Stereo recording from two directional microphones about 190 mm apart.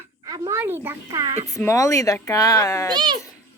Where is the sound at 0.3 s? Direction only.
20° right (ahead or behind).